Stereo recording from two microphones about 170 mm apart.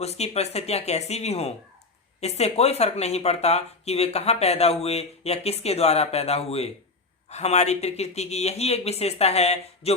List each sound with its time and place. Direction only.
0.0 s speech: 40° left (ahead or behind)